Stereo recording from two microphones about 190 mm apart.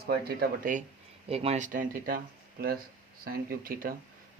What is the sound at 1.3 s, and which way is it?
Speech, 30° right (ahead or behind).